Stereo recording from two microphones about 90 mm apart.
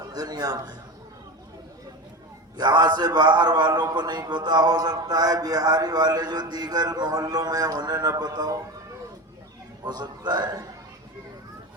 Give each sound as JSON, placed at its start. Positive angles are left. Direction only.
{"t": 0.0, "sound": "a man's voice", "side_deg": -50}
{"t": 2.6, "sound": "a man's voice", "side_deg": -50}
{"t": 9.8, "sound": "a man's voice", "side_deg": -50}